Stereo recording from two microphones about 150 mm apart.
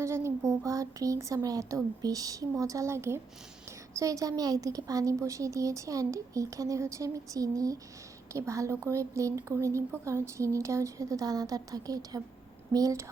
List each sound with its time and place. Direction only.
0.0 s a woman's voice: 20° right (ahead or behind)